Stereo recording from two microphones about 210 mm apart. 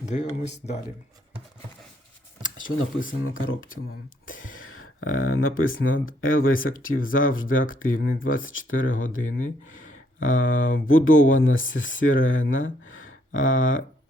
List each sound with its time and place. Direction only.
0.1 s speech: 35° left (ahead or behind)
3.0 s speech: 40° left (ahead or behind)
3.3 s speech: 70° left (ahead or behind)